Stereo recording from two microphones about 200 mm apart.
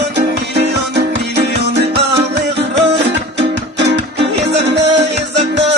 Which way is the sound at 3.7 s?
60° right (ahead or behind).